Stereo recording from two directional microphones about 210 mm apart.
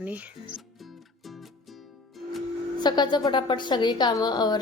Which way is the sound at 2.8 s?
20° left (ahead or behind).